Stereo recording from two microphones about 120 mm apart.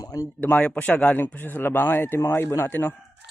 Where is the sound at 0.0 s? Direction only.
25° left (ahead or behind).